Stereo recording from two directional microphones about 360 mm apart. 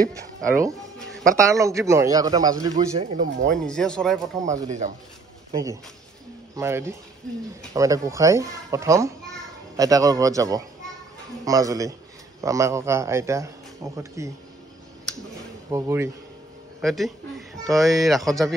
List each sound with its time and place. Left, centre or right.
0.6 s music: centre
1.4 s a man's voice: centre
3.6 s speech: centre
4.5 s speech: centre
5.5 s a man's voice: centre
15.7 s a man's voice: centre